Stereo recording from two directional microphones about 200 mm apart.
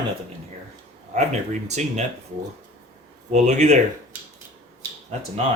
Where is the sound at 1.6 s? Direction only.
35° right (ahead or behind).